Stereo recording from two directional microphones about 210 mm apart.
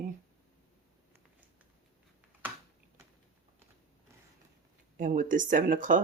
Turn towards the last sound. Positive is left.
turn(degrees=-40)  # may be behind; listen again after turning